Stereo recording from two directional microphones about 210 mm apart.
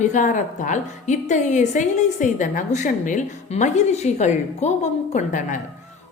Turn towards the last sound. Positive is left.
turn(degrees=35)  # may be behind; listen again after turning